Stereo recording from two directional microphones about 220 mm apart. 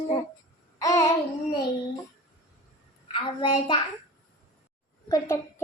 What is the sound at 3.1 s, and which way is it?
Child singing, 20° left (ahead or behind).